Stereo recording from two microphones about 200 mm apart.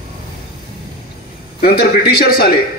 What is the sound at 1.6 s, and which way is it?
A man's voice, 50° left (ahead or behind).